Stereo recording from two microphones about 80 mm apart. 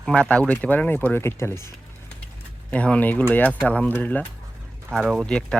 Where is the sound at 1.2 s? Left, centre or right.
Left.